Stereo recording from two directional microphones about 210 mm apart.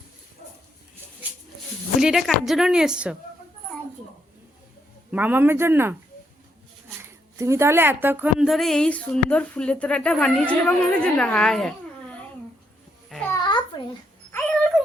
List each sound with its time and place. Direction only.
2.0 s a woman's voice: centre (ahead or behind)
5.1 s speech: 10° right (ahead or behind)
7.3 s a woman's voice: 15° right (ahead or behind)
13.1 s babbling: 5° left (ahead or behind)
13.3 s a sound: 20° left (ahead or behind)
14.3 s a sound: 10° left (ahead or behind)